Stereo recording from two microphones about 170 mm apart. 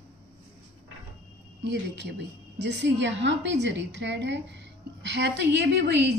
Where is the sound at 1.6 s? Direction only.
90° right.